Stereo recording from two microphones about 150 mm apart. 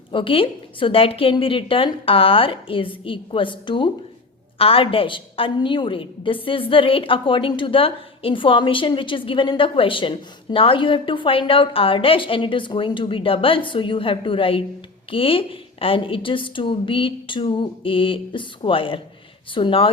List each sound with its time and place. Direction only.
0.1 s a woman's voice: 35° left (ahead or behind)